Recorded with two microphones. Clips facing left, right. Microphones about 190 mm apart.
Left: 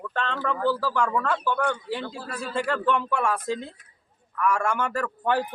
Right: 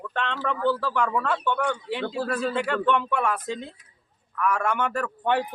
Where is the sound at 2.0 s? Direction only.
65° right (ahead or behind).